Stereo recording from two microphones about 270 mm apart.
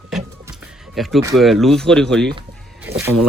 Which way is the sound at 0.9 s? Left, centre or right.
Centre.